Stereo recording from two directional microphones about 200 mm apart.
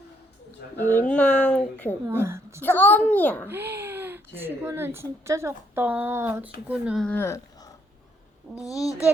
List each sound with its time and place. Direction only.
0.8 s speech: 10° left (ahead or behind)
2.0 s a woman's voice: 10° right (ahead or behind)
2.6 s a child's voice: 10° left (ahead or behind)
3.4 s speech: 10° right (ahead or behind); by 7.7 s 15° left (ahead or behind)